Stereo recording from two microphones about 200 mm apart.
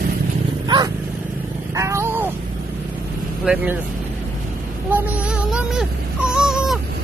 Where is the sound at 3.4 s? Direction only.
5° right (ahead or behind).